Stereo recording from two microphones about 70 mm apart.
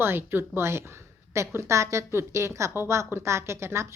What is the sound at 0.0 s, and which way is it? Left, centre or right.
A woman's voice, right.